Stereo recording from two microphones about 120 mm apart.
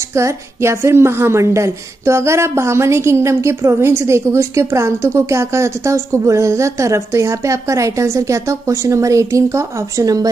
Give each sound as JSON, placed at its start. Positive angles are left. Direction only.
{"t": 0.1, "sound": "a woman's voice", "side_deg": -25}